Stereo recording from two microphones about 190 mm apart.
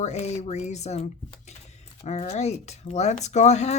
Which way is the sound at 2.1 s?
35° left (ahead or behind).